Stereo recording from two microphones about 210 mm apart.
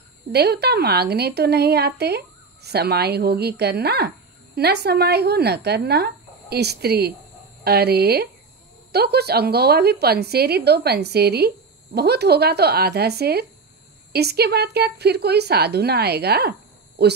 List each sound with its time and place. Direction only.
0.3 s a woman's voice: 50° right (ahead or behind)